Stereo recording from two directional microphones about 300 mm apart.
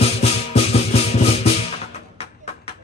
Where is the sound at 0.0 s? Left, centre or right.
Centre.